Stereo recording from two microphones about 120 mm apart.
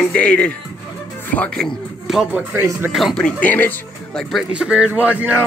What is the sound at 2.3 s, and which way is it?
Speech, 20° right (ahead or behind).